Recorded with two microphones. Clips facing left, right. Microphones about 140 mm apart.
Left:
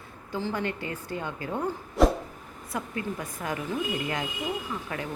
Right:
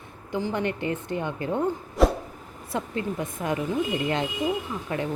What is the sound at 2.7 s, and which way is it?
Speech, 25° right (ahead or behind).